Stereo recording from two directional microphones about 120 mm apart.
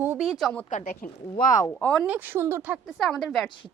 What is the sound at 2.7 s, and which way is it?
Speech, centre (ahead or behind).